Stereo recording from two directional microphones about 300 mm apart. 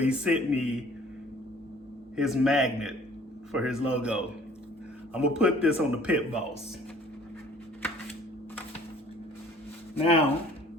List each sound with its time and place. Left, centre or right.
0.0 s a man's voice: centre
2.1 s a man's voice: centre
10.0 s speech: centre